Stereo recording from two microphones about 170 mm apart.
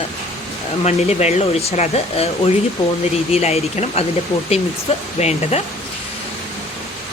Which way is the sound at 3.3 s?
40° left (ahead or behind).